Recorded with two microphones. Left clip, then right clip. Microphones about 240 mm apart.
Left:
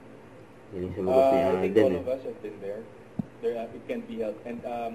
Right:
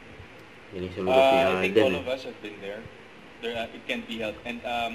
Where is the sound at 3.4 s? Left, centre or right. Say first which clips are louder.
Left 1 dB; centre.